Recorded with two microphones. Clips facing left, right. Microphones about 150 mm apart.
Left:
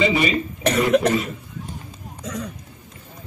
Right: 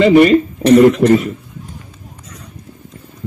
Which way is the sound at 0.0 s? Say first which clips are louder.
Right 12 dB; 60° right (ahead or behind).